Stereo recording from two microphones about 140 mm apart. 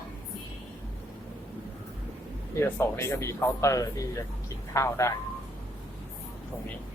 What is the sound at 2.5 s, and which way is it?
Speech, 20° left (ahead or behind).